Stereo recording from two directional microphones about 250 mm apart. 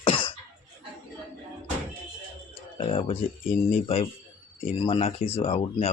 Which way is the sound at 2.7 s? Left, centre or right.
Left.